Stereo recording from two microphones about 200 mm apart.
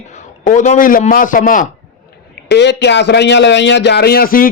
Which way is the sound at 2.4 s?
55° left (ahead or behind).